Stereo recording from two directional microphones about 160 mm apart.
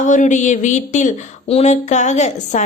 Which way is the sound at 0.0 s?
50° left (ahead or behind).